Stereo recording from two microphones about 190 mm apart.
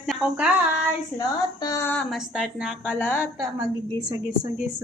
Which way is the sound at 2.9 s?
10° left (ahead or behind).